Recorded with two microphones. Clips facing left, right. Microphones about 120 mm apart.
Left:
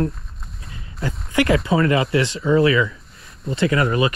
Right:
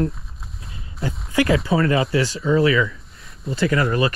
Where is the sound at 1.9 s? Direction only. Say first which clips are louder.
Left 1 dB; 30° right (ahead or behind).